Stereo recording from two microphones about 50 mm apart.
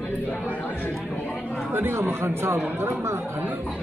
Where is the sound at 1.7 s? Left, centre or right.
Right.